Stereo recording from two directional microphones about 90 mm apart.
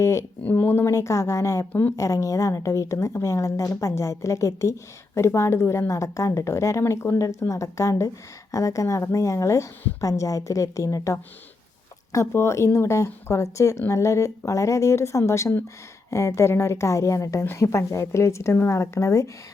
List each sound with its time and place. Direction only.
0.0 s speech: 30° left (ahead or behind)
0.4 s speech: 20° left (ahead or behind)